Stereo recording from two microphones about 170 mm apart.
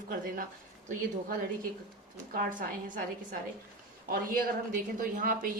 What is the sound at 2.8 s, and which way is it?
Speech, 50° right (ahead or behind).